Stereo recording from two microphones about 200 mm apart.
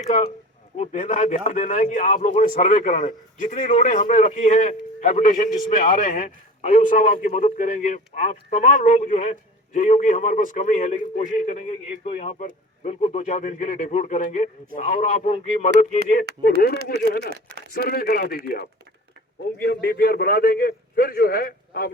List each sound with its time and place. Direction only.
0.8 s a man's voice: 40° left (ahead or behind)
17.2 s speech: 55° right (ahead or behind)
17.7 s a man's voice: 50° left (ahead or behind)